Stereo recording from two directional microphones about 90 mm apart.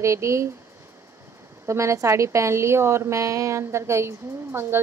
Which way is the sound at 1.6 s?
30° right (ahead or behind).